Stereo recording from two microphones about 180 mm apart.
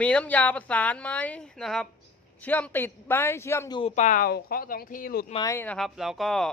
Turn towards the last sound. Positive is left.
turn(degrees=0)  # may be behind; listen again after turning